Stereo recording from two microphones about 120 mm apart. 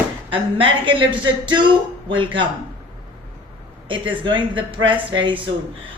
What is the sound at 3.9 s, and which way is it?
A woman's voice, 45° right (ahead or behind).